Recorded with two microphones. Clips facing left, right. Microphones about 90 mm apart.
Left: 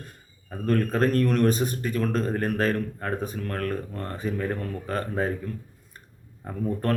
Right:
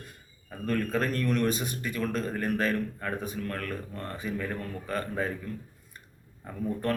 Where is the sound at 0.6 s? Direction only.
40° left (ahead or behind).